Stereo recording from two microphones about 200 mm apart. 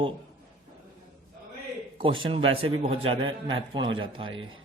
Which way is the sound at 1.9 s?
25° right (ahead or behind).